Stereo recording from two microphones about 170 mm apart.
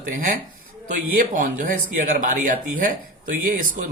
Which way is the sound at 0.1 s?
50° right (ahead or behind).